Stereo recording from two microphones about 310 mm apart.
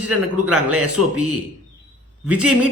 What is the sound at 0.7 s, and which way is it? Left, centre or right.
Speech, right.